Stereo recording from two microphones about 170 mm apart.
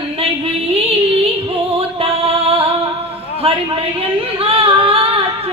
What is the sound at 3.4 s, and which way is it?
Speech, 35° right (ahead or behind).